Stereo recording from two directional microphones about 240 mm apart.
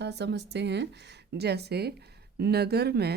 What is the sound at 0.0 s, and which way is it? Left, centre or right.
Speech, right.